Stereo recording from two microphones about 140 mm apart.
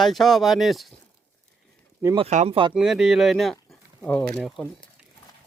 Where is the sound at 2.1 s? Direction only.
50° right (ahead or behind).